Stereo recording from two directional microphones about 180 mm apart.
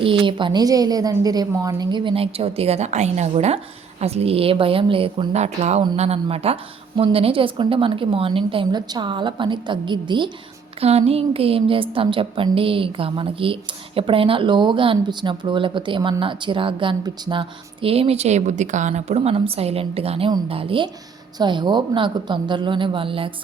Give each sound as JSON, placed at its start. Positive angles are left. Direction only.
{"t": 0.0, "sound": "a woman's voice", "side_deg": -30}